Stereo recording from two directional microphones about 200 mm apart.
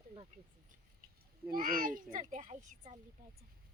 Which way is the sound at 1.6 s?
45° right (ahead or behind).